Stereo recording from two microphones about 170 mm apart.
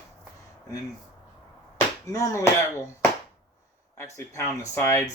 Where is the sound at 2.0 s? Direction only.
20° left (ahead or behind).